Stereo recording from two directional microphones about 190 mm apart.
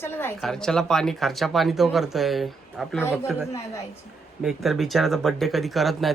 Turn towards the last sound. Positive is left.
turn(degrees=0)  # may be behind; listen again after turning